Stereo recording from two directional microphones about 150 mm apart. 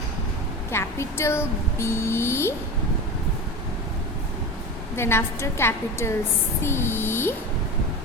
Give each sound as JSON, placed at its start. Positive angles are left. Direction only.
{"t": 0.7, "sound": "speech", "side_deg": 15}
{"t": 4.9, "sound": "speech", "side_deg": 15}